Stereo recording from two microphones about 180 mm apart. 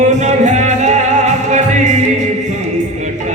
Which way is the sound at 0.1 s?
40° right (ahead or behind).